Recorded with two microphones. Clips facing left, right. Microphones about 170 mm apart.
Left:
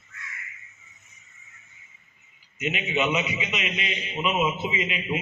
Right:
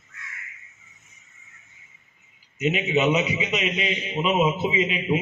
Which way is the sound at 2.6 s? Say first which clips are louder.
Right 4 dB; 35° right (ahead or behind).